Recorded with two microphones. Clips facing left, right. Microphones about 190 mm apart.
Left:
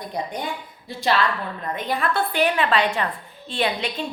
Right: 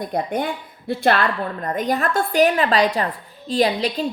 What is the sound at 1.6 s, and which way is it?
A woman's voice, 45° right (ahead or behind).